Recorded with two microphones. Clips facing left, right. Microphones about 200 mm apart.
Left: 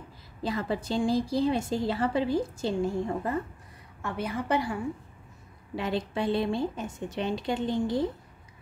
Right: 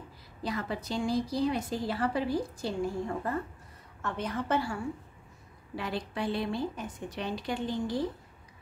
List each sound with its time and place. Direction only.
0.4 s a woman's voice: 30° left (ahead or behind)
4.0 s a woman's voice: 10° left (ahead or behind)
5.8 s a woman's voice: 25° left (ahead or behind)